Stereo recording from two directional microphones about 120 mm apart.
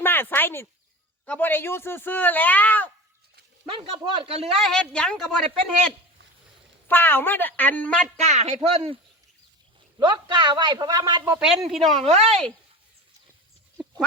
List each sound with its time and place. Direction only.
0.0 s speech: 20° left (ahead or behind)
3.7 s speech: 40° right (ahead or behind)
4.6 s a woman's voice: 5° left (ahead or behind)
6.8 s speech: 15° left (ahead or behind)
8.2 s speech: 70° right (ahead or behind)
10.0 s a man's voice: 40° right (ahead or behind)
11.3 s a woman's voice: 5° right (ahead or behind)
12.0 s a woman's voice: 65° right (ahead or behind)
12.3 s a woman's voice: 5° left (ahead or behind)